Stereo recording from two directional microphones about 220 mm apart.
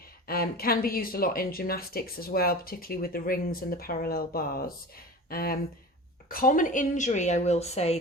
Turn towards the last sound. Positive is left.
turn(degrees=30)  # may be behind; listen again after turning